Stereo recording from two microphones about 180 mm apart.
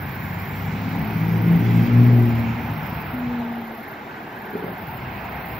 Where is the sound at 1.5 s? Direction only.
Centre (ahead or behind).